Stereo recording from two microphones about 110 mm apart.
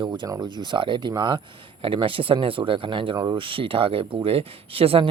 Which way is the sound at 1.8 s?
50° right (ahead or behind).